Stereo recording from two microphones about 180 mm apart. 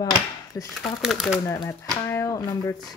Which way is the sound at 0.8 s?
Centre (ahead or behind).